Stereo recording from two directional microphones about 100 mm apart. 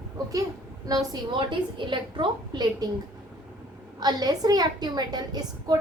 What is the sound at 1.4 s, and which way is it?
A woman's voice, 55° right (ahead or behind).